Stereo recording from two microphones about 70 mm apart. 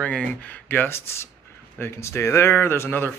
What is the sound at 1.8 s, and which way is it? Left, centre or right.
Speech, left.